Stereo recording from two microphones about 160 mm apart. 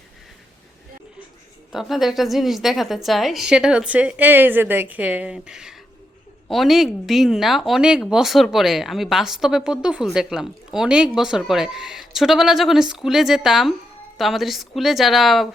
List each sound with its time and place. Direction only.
1.7 s speech: centre (ahead or behind)